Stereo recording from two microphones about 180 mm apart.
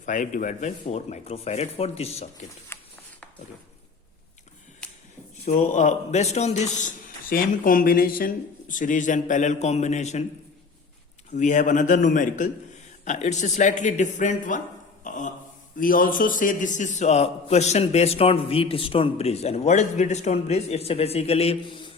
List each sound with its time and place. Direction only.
0.0 s a man's voice: 45° left (ahead or behind)
2.7 s a sound: 10° left (ahead or behind)
5.5 s a man's voice: 45° left (ahead or behind)
11.3 s a man's voice: 45° left (ahead or behind)
15.0 s a sound: 45° left (ahead or behind)
15.8 s a man's voice: 50° left (ahead or behind); by 21.9 s 25° left (ahead or behind)